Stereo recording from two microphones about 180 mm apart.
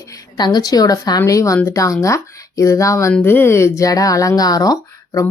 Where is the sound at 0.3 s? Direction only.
25° left (ahead or behind).